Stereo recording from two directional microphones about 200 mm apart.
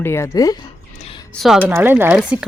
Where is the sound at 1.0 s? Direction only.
30° left (ahead or behind).